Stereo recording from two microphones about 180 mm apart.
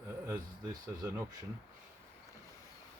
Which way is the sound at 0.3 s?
15° right (ahead or behind).